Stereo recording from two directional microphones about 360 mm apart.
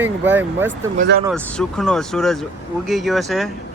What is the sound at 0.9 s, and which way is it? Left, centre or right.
Speech, right.